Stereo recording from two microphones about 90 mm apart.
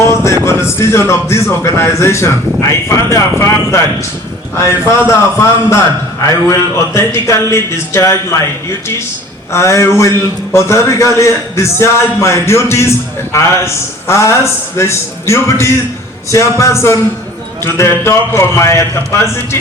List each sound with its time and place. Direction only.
0.0 s music: 30° left (ahead or behind)
0.4 s a man's voice: 30° left (ahead or behind)
6.5 s a man's voice: 30° left (ahead or behind)
9.5 s a man's voice: 30° left (ahead or behind)